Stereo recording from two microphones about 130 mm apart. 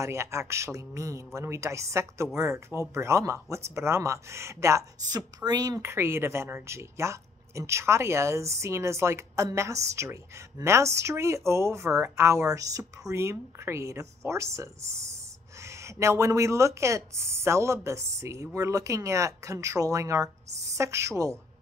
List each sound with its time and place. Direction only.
0.0 s speech: 20° right (ahead or behind)